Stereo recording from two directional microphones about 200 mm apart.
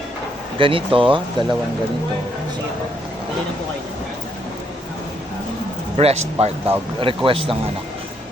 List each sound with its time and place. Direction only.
0.6 s speech: 25° right (ahead or behind)
6.0 s speech: 30° right (ahead or behind)